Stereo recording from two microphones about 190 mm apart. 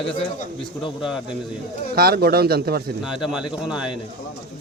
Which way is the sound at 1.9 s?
55° right (ahead or behind).